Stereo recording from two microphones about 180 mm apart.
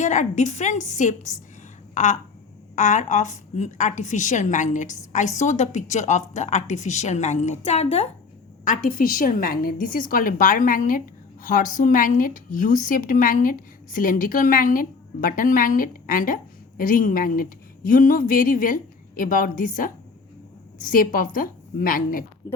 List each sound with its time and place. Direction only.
0.0 s a woman's voice: 40° left (ahead or behind)
8.6 s a woman's voice: 50° left (ahead or behind)